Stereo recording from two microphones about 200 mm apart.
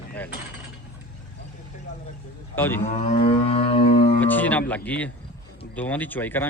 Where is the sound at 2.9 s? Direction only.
35° left (ahead or behind).